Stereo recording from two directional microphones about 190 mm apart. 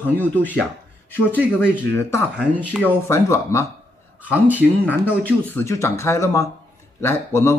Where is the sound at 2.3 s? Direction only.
5° right (ahead or behind).